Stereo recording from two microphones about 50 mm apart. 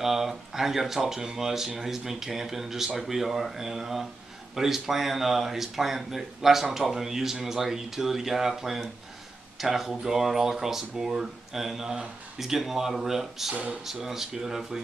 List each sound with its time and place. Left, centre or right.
0.0 s speech: centre